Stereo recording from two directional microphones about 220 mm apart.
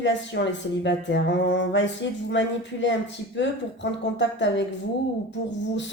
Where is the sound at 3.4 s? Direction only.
55° left (ahead or behind).